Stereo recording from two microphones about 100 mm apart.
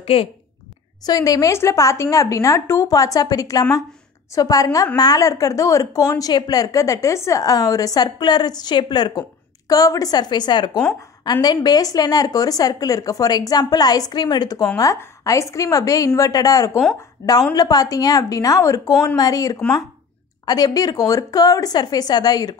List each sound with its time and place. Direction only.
0.0 s a woman's voice: 70° left (ahead or behind)
1.0 s a woman's voice: 40° left (ahead or behind)